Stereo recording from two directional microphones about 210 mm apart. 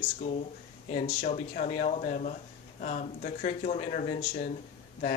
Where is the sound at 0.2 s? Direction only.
35° left (ahead or behind).